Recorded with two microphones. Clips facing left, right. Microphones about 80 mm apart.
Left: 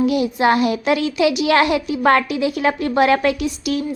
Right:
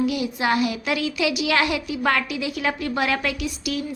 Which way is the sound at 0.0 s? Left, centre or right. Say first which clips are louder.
Left 7 dB; left.